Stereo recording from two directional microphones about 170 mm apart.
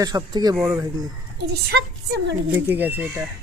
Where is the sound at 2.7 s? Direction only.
10° right (ahead or behind).